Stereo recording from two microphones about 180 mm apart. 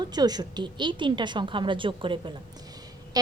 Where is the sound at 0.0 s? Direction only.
20° right (ahead or behind).